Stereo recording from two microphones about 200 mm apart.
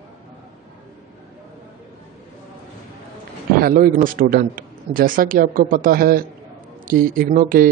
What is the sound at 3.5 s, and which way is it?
A man's voice, 45° right (ahead or behind).